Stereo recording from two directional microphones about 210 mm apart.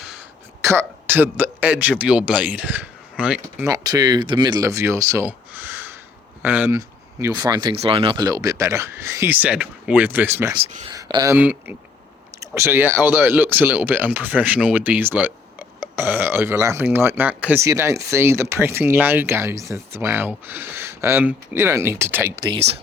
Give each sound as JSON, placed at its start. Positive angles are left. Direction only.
{"t": 0.0, "sound": "speech", "side_deg": -5}
{"t": 3.7, "sound": "speech", "side_deg": -20}
{"t": 10.6, "sound": "speech", "side_deg": -30}
{"t": 10.9, "sound": "speech", "side_deg": -15}